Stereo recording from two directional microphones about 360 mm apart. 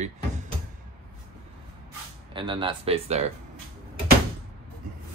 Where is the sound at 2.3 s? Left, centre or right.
Centre.